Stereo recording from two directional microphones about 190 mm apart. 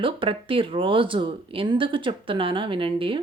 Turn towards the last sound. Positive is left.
turn(degrees=-25)  # may be behind; listen again after turning